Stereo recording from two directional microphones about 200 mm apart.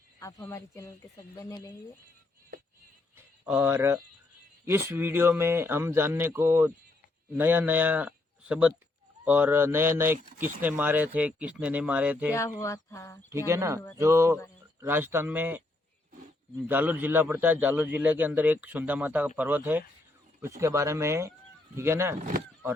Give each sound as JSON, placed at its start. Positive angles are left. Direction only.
{"t": 0.2, "sound": "speech", "side_deg": 15}
{"t": 3.4, "sound": "a man's voice", "side_deg": -10}
{"t": 12.3, "sound": "speech", "side_deg": 15}
{"t": 13.3, "sound": "a man's voice", "side_deg": -15}
{"t": 16.6, "sound": "a man's voice", "side_deg": -10}